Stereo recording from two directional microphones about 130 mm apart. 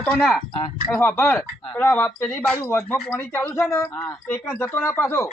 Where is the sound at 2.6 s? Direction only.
20° left (ahead or behind).